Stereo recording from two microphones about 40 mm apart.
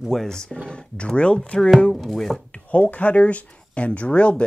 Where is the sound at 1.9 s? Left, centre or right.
Centre.